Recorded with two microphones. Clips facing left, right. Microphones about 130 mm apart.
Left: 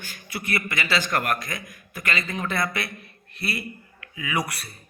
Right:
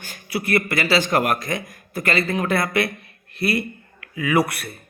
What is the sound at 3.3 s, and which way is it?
Speech, centre (ahead or behind).